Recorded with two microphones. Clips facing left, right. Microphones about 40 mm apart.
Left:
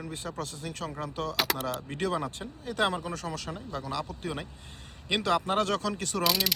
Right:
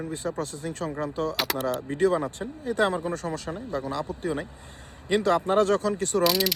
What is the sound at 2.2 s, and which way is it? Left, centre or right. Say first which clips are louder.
Speech: right 5 dB; left.